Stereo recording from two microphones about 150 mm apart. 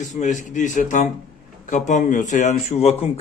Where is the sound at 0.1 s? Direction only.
55° left (ahead or behind).